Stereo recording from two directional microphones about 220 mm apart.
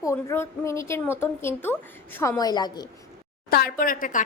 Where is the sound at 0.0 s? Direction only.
15° left (ahead or behind).